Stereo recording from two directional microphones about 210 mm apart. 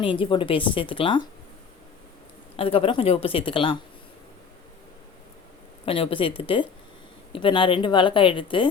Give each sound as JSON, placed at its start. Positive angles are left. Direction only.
{"t": 0.0, "sound": "speech", "side_deg": 25}
{"t": 2.6, "sound": "speech", "side_deg": 25}
{"t": 5.8, "sound": "speech", "side_deg": 25}